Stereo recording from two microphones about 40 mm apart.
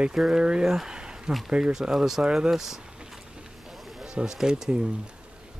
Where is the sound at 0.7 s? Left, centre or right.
Centre.